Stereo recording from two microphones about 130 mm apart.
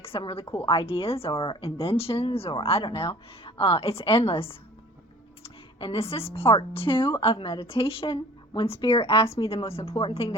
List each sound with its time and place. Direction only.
0.0 s a woman's voice: 45° left (ahead or behind)